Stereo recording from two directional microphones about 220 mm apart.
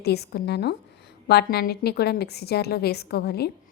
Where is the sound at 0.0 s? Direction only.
45° left (ahead or behind).